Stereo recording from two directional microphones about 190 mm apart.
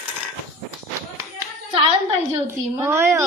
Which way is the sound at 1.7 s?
30° right (ahead or behind).